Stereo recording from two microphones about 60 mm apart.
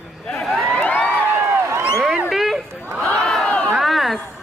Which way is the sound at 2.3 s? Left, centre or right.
Centre.